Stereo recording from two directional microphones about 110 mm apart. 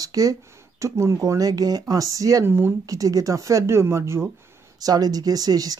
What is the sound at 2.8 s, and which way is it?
Speech, 30° right (ahead or behind).